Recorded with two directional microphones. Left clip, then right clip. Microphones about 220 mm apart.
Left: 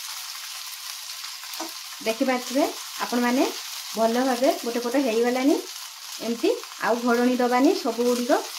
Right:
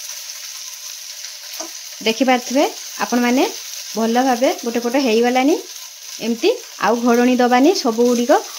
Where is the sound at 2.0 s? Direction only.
45° right (ahead or behind).